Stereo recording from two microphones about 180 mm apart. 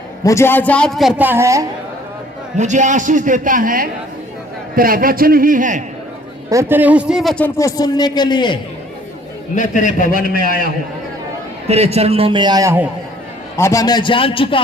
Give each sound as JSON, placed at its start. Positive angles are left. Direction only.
{"t": 0.3, "sound": "a man's voice", "side_deg": 15}
{"t": 2.6, "sound": "a man's voice", "side_deg": -40}
{"t": 6.5, "sound": "speech", "side_deg": -15}
{"t": 9.6, "sound": "a man's voice", "side_deg": 45}
{"t": 11.7, "sound": "a man's voice", "side_deg": -35}
{"t": 13.6, "sound": "a man's voice", "side_deg": 15}